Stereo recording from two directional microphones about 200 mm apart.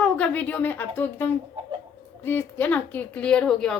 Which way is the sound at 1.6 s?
25° right (ahead or behind).